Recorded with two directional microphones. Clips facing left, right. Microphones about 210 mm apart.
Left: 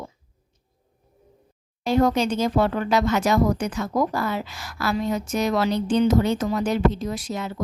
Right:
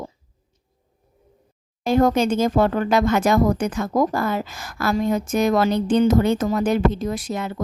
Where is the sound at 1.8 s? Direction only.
50° right (ahead or behind).